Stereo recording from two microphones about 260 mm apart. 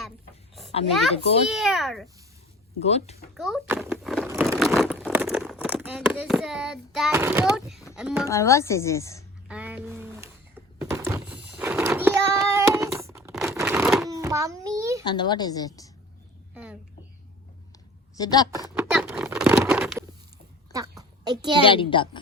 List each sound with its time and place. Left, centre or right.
1.1 s a woman's voice: left
1.5 s a child's voice: centre
2.8 s a woman's voice: left
3.3 s a sound: centre
4.4 s crumpling: centre
7.9 s a child's voice: centre
8.3 s speech: centre
9.5 s a sound: centre
14.1 s a sound: centre
15.0 s speech: centre
18.2 s speech: centre
18.7 s a sound: centre
21.6 s a woman's voice: centre